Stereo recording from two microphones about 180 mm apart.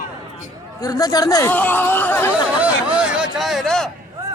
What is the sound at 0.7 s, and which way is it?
A man's voice, 20° left (ahead or behind).